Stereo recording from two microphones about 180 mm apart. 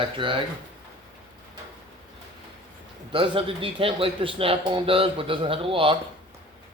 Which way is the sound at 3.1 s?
30° right (ahead or behind).